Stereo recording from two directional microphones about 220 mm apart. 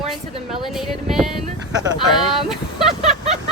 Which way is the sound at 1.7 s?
15° right (ahead or behind).